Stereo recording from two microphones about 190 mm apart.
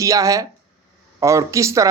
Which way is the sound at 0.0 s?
15° right (ahead or behind).